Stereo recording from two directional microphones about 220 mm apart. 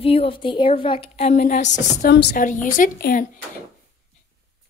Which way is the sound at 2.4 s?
35° left (ahead or behind).